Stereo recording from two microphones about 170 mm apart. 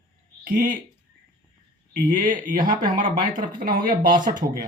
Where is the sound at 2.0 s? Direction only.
50° right (ahead or behind).